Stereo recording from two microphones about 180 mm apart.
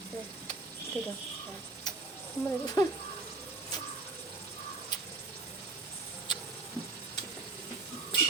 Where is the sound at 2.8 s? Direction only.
20° left (ahead or behind).